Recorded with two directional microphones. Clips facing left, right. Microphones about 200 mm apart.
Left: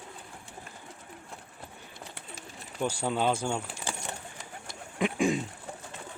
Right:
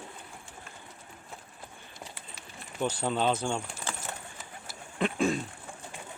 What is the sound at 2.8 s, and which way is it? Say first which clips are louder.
Speech: even; 10° left (ahead or behind).